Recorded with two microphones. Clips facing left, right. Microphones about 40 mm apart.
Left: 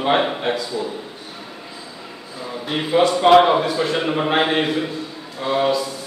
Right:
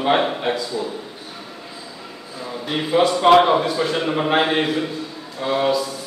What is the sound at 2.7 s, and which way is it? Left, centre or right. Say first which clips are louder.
A man's voice: left 1 dB; centre.